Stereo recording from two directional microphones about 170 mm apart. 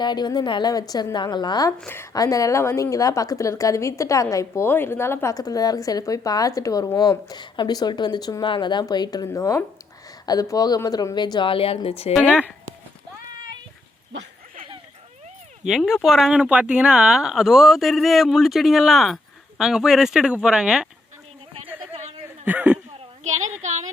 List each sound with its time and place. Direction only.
0.0 s a woman's voice: 25° left (ahead or behind)
1.8 s a woman's voice: 15° left (ahead or behind); by 12.1 s 35° left (ahead or behind)
15.6 s speech: centre (ahead or behind)
21.6 s a sound: 40° right (ahead or behind)
22.4 s speech: 10° right (ahead or behind)
23.2 s a sound: 45° right (ahead or behind)